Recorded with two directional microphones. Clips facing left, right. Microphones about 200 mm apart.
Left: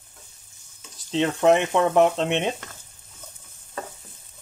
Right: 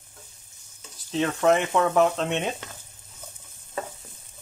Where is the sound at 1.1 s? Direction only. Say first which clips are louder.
Left 3 dB; 20° left (ahead or behind).